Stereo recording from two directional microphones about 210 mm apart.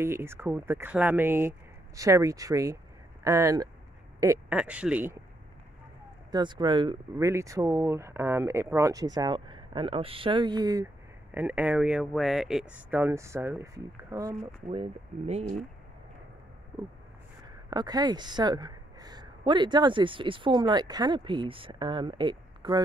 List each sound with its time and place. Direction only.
0.0 s speech: 10° right (ahead or behind)
6.3 s speech: 20° right (ahead or behind)
11.3 s speech: 10° right (ahead or behind)
14.7 s speech: 30° right (ahead or behind)
17.6 s a woman's voice: 20° right (ahead or behind)